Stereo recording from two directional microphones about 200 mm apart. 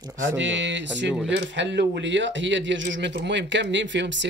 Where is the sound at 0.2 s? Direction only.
65° right (ahead or behind).